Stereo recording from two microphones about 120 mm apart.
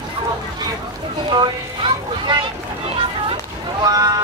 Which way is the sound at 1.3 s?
40° right (ahead or behind).